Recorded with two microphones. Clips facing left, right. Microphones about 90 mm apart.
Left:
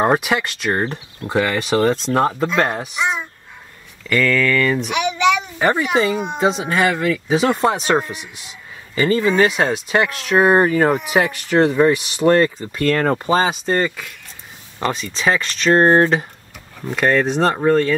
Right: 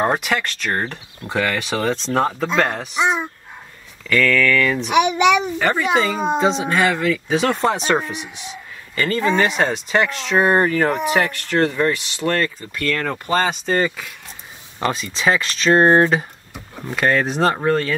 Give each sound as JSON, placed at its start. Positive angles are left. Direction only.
{"t": 0.0, "sound": "speech", "side_deg": 10}
{"t": 3.0, "sound": "speech", "side_deg": -30}
{"t": 4.1, "sound": "speech", "side_deg": 5}
{"t": 6.1, "sound": "speech", "side_deg": -35}
{"t": 6.7, "sound": "speech", "side_deg": 10}
{"t": 8.9, "sound": "speech", "side_deg": 15}
{"t": 13.3, "sound": "speech", "side_deg": 5}